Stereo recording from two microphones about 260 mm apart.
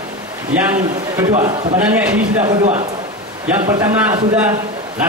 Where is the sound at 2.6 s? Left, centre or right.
Right.